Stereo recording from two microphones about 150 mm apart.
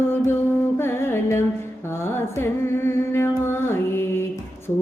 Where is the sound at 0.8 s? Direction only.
15° left (ahead or behind).